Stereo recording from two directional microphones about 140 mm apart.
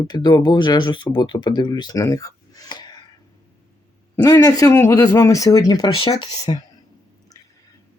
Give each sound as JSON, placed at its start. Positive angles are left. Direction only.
{"t": 0.1, "sound": "speech", "side_deg": 30}
{"t": 4.4, "sound": "speech", "side_deg": 25}
{"t": 6.0, "sound": "speech", "side_deg": 40}